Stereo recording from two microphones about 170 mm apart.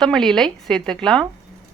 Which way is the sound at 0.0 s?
5° left (ahead or behind).